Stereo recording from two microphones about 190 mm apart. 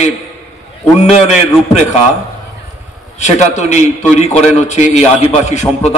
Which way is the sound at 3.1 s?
35° left (ahead or behind).